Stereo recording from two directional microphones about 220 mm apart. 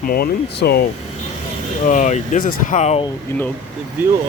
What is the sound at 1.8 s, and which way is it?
Speech, 35° left (ahead or behind).